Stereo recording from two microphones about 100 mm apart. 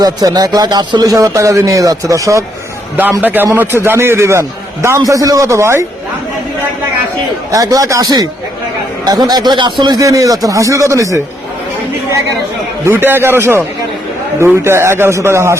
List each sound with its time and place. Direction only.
0.0 s speech: 40° right (ahead or behind)
2.9 s a man's voice: 20° right (ahead or behind)
7.5 s speech: 35° right (ahead or behind)
12.9 s a man's voice: 20° right (ahead or behind)